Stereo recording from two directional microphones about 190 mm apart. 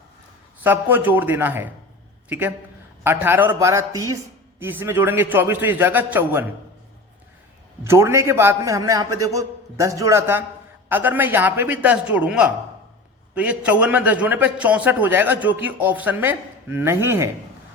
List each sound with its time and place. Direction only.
0.6 s a man's voice: 10° right (ahead or behind)
3.0 s a man's voice: 10° right (ahead or behind)
7.9 s a man's voice: 15° right (ahead or behind)